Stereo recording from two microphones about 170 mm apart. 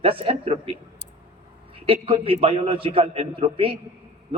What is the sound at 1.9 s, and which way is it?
A man's voice, 35° right (ahead or behind).